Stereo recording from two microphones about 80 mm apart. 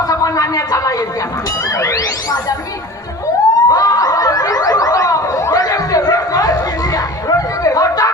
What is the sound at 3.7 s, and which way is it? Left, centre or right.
Snicker, left.